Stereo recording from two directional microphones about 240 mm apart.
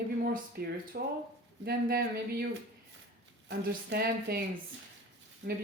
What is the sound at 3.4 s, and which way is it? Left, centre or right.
Speech, right.